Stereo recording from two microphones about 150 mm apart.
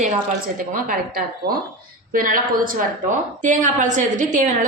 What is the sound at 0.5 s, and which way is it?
A woman's voice, 70° right (ahead or behind).